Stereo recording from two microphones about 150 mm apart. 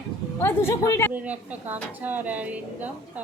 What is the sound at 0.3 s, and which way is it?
Speech, 15° left (ahead or behind).